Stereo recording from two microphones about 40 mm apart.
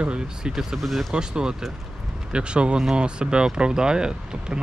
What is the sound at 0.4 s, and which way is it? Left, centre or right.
Speech, centre.